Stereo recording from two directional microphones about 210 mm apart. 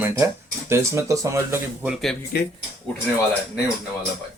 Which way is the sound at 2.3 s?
50° left (ahead or behind).